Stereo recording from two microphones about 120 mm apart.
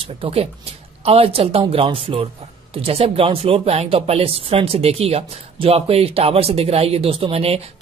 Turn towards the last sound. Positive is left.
turn(degrees=-55)  # may be behind; listen again after turning